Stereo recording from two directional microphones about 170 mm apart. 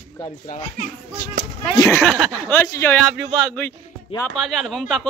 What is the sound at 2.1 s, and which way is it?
Speech, 10° right (ahead or behind).